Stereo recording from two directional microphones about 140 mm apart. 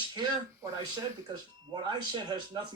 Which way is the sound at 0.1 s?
30° right (ahead or behind).